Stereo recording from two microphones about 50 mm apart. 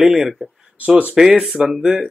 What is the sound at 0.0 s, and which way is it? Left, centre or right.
Speech, centre.